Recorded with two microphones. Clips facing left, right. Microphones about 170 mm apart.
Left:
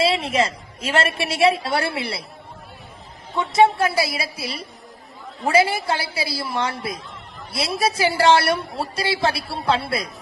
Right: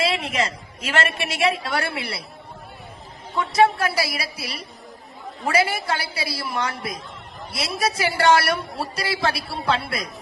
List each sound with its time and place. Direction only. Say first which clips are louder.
0.0 s a woman's voice: left 4 dB; 30° left (ahead or behind)
3.3 s a woman's voice: left 2 dB; 20° left (ahead or behind)